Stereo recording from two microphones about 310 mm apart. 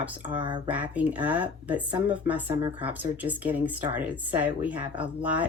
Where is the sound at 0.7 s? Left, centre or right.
Centre.